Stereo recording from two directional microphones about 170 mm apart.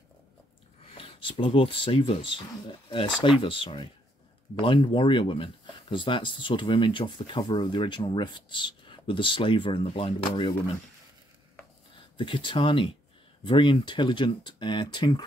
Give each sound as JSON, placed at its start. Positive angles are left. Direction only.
{"t": 0.9, "sound": "a sound", "side_deg": 30}
{"t": 1.4, "sound": "speech", "side_deg": 30}
{"t": 12.2, "sound": "speech", "side_deg": 30}